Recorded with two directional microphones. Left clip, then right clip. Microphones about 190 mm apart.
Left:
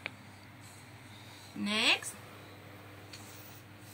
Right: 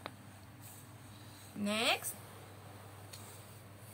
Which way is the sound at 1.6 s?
55° right (ahead or behind).